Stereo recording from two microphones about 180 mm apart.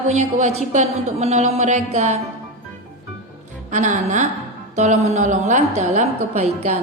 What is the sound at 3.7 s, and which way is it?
A woman's voice, 40° right (ahead or behind).